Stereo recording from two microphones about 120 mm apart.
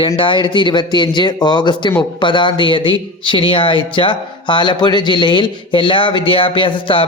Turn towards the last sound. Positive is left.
turn(degrees=45)  # may be behind; listen again after turning